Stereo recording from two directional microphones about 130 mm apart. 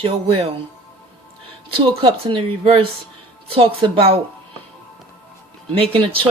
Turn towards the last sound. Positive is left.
turn(degrees=-45)  # may be behind; listen again after turning